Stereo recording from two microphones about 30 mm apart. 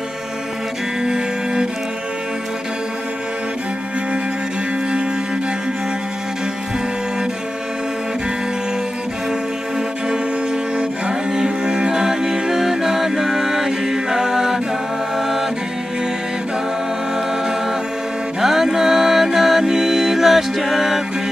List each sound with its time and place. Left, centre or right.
1.0 s music: right
11.3 s music: right
18.4 s music: centre